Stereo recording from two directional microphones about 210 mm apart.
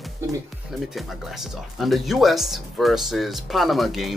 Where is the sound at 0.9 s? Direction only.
Centre (ahead or behind).